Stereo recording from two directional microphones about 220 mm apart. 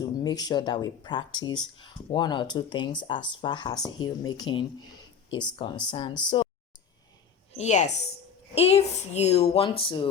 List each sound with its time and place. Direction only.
0.2 s speech: 15° left (ahead or behind)
7.5 s a woman's voice: 30° left (ahead or behind)